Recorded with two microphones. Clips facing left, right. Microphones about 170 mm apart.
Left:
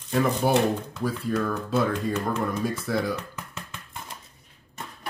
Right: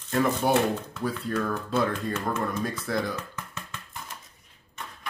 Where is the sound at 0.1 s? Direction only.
Centre (ahead or behind).